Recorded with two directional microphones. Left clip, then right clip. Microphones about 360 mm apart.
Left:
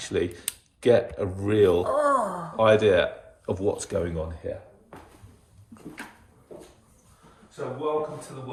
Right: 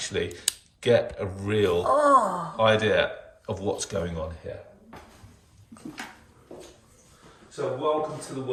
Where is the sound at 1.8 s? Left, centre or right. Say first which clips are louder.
Right 3 dB; centre.